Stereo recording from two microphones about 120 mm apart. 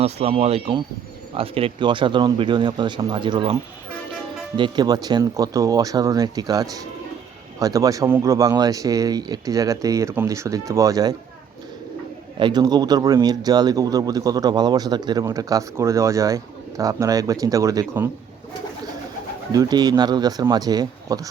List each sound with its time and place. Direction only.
0.0 s speech: 60° right (ahead or behind); by 11.1 s 30° right (ahead or behind)
12.4 s speech: 35° right (ahead or behind)
19.5 s speech: 30° right (ahead or behind)